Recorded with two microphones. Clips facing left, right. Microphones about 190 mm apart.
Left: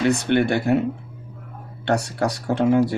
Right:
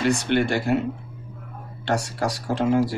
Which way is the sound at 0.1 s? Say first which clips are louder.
Left 2 dB; 60° left (ahead or behind).